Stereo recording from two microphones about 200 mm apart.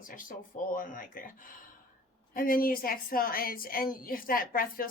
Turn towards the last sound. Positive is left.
turn(degrees=45)  # may be behind; listen again after turning